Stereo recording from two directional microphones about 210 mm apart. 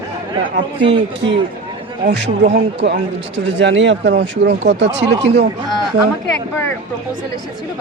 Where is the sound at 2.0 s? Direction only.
55° right (ahead or behind).